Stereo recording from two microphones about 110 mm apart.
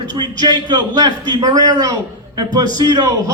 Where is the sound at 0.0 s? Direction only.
40° right (ahead or behind).